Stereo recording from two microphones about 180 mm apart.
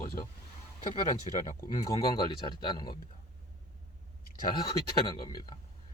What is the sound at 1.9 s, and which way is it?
Speech, 25° left (ahead or behind).